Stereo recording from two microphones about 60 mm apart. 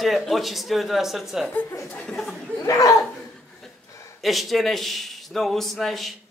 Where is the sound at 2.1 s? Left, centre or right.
Centre.